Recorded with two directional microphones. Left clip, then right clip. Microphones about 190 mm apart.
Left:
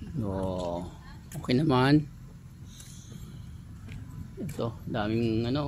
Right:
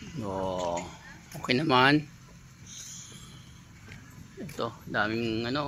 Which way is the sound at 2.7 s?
10° right (ahead or behind).